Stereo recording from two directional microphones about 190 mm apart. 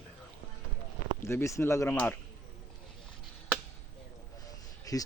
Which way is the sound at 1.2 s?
15° left (ahead or behind).